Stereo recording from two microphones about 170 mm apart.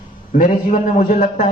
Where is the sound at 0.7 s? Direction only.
50° left (ahead or behind).